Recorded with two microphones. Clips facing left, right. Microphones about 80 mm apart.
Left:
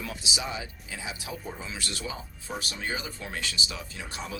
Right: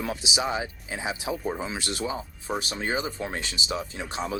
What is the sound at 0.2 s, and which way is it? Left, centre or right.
Speech, right.